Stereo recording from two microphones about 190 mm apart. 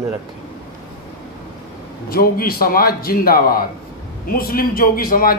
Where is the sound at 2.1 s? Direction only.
50° left (ahead or behind).